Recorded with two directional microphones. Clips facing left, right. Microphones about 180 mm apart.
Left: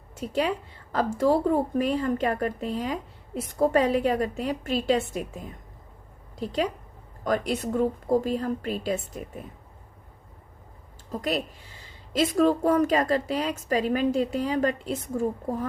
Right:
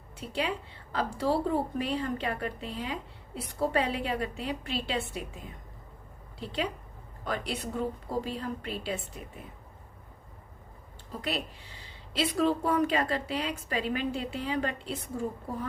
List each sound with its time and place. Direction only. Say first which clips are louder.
0.2 s a woman's voice: left 6 dB; 40° left (ahead or behind)
7.3 s a woman's voice: left 8 dB; 45° left (ahead or behind)
11.1 s a woman's voice: left 6 dB; 45° left (ahead or behind)